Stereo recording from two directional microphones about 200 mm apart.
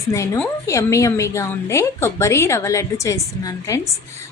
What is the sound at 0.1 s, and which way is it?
A woman's voice, 10° left (ahead or behind).